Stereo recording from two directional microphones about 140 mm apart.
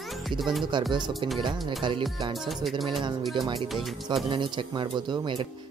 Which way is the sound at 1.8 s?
35° right (ahead or behind).